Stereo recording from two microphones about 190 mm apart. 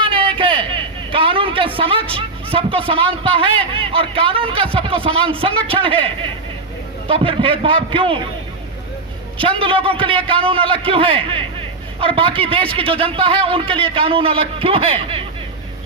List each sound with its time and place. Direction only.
0.0 s a sound: 30° right (ahead or behind)
3.8 s a man's voice: 30° right (ahead or behind)
9.4 s a man's voice: 30° right (ahead or behind)